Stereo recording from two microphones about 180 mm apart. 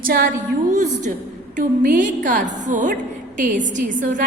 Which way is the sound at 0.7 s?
40° right (ahead or behind).